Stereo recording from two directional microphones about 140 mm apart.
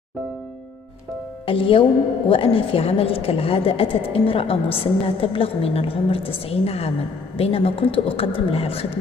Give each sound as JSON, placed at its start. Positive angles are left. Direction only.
{"t": 1.4, "sound": "a woman's voice", "side_deg": 40}